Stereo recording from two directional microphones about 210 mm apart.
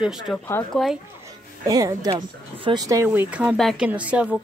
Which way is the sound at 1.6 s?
15° right (ahead or behind).